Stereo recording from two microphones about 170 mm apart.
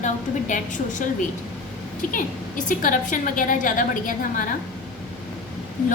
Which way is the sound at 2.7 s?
50° left (ahead or behind).